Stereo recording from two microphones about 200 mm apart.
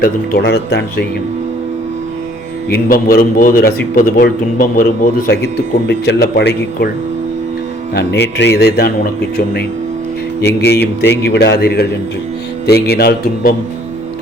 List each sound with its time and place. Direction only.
0.0 s speech: 55° left (ahead or behind)
2.6 s a man's voice: 50° left (ahead or behind)
7.9 s a man's voice: 55° left (ahead or behind)